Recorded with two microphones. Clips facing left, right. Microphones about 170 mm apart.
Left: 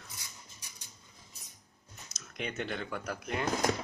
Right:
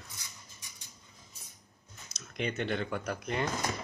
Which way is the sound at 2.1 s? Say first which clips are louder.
Right 4 dB; centre (ahead or behind).